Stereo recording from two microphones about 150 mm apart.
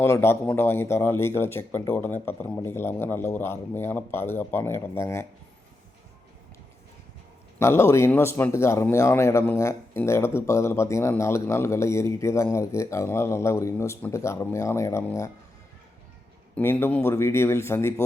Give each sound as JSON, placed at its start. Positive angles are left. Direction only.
{"t": 0.0, "sound": "speech", "side_deg": 15}
{"t": 7.6, "sound": "speech", "side_deg": 15}
{"t": 16.6, "sound": "speech", "side_deg": 15}